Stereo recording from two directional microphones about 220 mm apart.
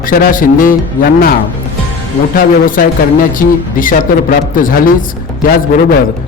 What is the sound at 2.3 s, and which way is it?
A man's voice, 40° left (ahead or behind).